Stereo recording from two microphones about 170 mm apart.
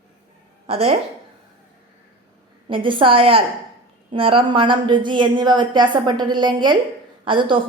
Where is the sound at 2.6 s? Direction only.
30° right (ahead or behind).